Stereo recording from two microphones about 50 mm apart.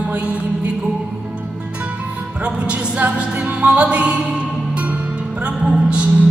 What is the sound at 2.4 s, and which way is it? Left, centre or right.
Music, right.